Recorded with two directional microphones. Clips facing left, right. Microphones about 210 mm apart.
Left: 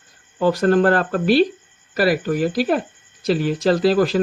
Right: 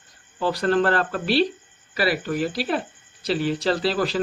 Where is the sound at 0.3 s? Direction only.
50° left (ahead or behind).